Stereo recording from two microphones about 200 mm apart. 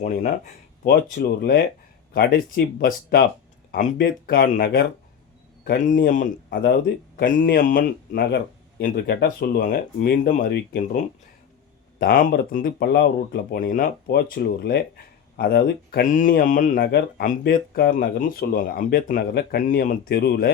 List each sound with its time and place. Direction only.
0.9 s speech: 50° left (ahead or behind)
5.6 s a man's voice: 40° left (ahead or behind)
6.5 s speech: 55° left (ahead or behind)
11.9 s speech: 50° left (ahead or behind)